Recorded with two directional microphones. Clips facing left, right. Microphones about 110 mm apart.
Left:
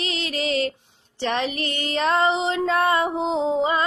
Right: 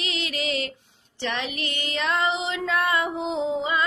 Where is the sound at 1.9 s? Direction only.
35° left (ahead or behind).